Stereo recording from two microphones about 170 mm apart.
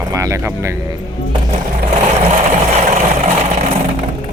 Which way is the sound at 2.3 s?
45° right (ahead or behind).